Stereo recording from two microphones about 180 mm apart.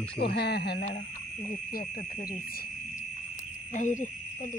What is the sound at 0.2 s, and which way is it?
Speech, 65° left (ahead or behind).